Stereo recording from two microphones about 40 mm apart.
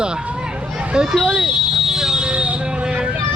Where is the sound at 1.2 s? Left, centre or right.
Right.